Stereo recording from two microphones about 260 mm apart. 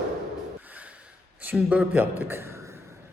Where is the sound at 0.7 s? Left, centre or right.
Centre.